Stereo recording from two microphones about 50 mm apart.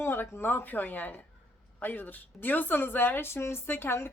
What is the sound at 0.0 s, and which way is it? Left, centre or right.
Speech, left.